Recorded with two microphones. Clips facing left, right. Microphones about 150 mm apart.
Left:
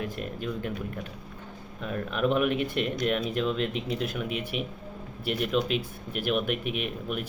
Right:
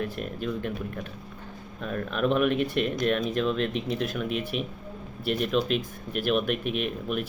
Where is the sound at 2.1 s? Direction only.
15° left (ahead or behind).